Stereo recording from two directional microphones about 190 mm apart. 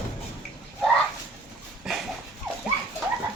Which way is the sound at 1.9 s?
5° right (ahead or behind).